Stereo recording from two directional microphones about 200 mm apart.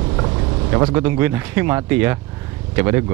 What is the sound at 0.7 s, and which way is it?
Speech, 20° right (ahead or behind).